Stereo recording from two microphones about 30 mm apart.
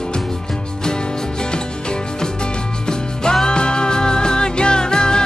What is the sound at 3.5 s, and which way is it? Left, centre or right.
Music, left.